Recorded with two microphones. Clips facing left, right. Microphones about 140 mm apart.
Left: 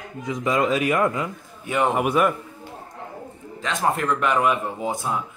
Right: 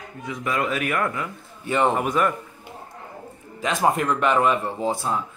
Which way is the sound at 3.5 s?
5° right (ahead or behind).